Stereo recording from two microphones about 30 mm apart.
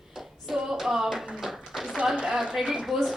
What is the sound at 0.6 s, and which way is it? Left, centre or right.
Tap, centre.